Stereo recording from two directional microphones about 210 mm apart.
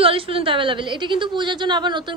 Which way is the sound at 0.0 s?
25° right (ahead or behind).